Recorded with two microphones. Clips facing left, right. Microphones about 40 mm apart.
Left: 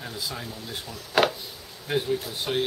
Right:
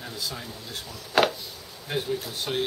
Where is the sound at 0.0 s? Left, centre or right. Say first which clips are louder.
Left 1 dB; centre.